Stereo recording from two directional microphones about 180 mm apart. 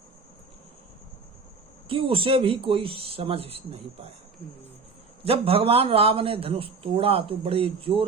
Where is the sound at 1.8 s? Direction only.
30° right (ahead or behind).